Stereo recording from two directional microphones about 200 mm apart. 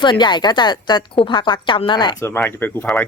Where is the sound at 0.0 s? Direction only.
25° left (ahead or behind).